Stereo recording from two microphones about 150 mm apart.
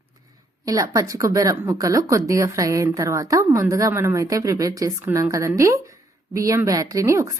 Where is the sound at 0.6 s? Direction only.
20° right (ahead or behind).